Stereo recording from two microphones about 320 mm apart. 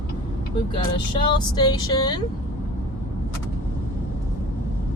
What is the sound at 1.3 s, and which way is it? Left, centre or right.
Speech, centre.